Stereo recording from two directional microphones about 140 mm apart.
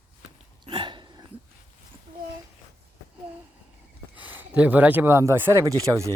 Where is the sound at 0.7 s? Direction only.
35° right (ahead or behind).